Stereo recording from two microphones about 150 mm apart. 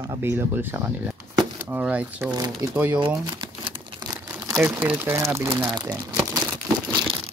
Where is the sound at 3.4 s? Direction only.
35° right (ahead or behind).